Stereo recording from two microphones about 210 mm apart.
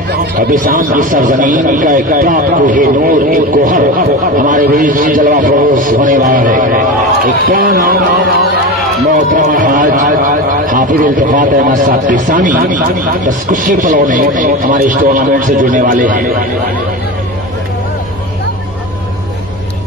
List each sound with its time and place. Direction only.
0.1 s speech: 45° right (ahead or behind)
9.1 s speech: 40° right (ahead or behind)